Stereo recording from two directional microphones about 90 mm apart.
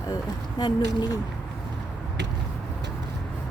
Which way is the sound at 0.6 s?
50° left (ahead or behind).